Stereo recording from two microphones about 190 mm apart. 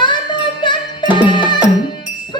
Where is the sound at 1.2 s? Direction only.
25° left (ahead or behind).